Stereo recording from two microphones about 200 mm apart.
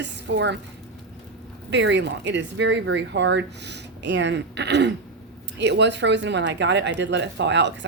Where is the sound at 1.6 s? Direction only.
60° right (ahead or behind).